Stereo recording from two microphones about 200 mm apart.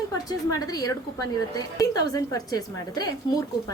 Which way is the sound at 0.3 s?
20° left (ahead or behind).